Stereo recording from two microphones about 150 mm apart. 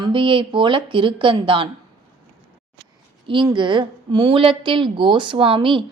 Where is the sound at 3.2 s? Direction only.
30° right (ahead or behind).